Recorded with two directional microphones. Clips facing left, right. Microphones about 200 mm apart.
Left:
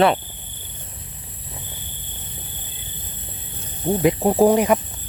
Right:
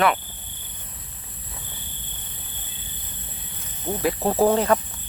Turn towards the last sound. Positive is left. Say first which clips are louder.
# left 4 dB
turn(degrees=15)  # may be behind; listen again after turning